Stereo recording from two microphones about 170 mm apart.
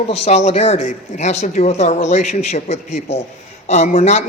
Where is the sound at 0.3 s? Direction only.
40° left (ahead or behind).